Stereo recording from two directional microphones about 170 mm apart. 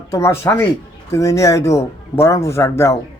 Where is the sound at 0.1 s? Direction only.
15° left (ahead or behind).